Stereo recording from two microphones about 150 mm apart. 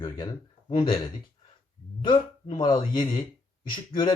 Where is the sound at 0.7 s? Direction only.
40° left (ahead or behind).